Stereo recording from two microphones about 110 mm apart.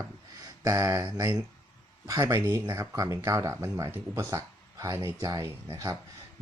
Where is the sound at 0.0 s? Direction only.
35° right (ahead or behind).